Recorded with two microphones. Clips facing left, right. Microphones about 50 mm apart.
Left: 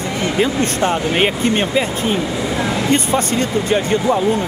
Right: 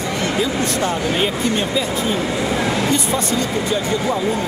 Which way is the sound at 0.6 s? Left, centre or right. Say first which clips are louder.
Left 2 dB; left.